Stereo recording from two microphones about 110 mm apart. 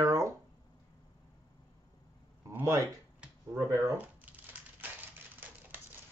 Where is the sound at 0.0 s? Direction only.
30° right (ahead or behind).